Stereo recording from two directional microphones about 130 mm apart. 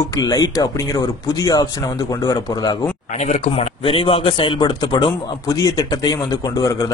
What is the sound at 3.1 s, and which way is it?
Speech, 60° left (ahead or behind).